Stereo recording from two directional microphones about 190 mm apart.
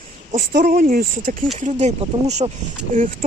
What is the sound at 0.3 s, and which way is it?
A woman's voice, 45° right (ahead or behind).